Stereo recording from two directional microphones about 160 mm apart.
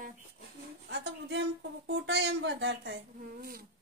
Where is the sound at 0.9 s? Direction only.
90° right.